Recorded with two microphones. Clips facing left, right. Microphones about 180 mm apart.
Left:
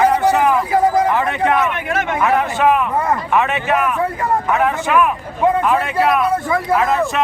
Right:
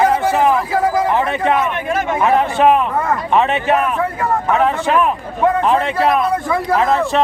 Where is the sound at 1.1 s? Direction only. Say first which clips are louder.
Right 1 dB; 20° right (ahead or behind).